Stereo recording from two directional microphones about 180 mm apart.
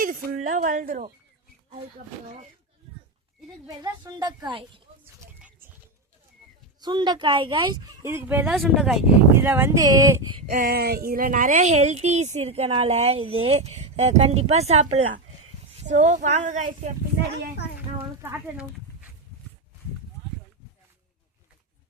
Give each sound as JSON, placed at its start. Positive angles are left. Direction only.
{"t": 0.0, "sound": "speech", "side_deg": -50}
{"t": 3.7, "sound": "speech", "side_deg": -20}
{"t": 5.2, "sound": "a sound", "side_deg": -10}
{"t": 6.8, "sound": "speech", "side_deg": -25}
{"t": 10.4, "sound": "a sound", "side_deg": -40}
{"t": 10.7, "sound": "speech", "side_deg": -60}
{"t": 18.2, "sound": "speech", "side_deg": -15}